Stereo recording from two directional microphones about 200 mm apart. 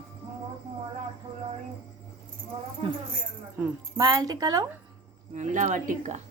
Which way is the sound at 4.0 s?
20° right (ahead or behind).